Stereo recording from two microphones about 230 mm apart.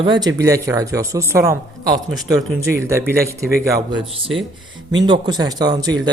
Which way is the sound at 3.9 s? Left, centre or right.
Right.